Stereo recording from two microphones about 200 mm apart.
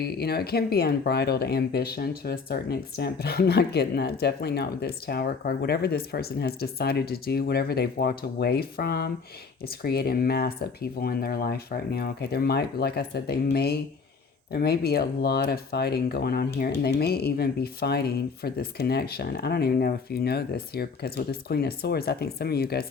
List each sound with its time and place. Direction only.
0.0 s speech: 50° left (ahead or behind)